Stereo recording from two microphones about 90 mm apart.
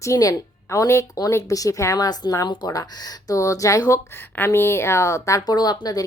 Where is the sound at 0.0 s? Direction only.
40° left (ahead or behind).